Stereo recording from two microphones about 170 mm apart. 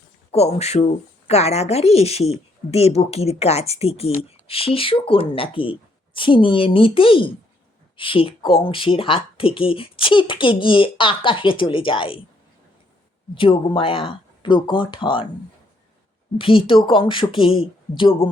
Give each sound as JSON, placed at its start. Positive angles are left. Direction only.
{"t": 0.3, "sound": "speech", "side_deg": 40}
{"t": 13.3, "sound": "speech", "side_deg": 30}
{"t": 16.4, "sound": "speech", "side_deg": 30}